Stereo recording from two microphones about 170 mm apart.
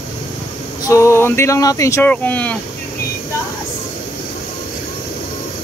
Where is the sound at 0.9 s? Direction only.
15° left (ahead or behind).